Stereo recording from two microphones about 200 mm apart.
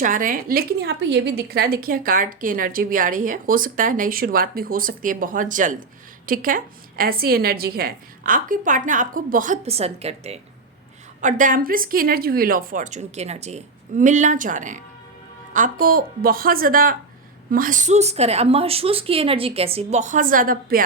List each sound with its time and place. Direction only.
0.0 s a woman's voice: 40° right (ahead or behind)